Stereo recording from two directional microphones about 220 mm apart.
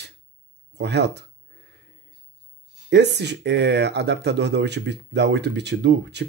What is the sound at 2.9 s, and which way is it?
Speech, 50° right (ahead or behind).